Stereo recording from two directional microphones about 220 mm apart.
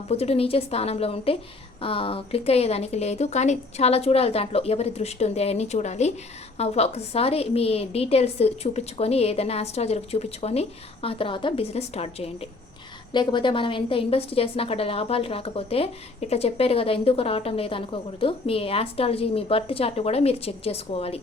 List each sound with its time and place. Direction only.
0.1 s a woman's voice: 30° left (ahead or behind)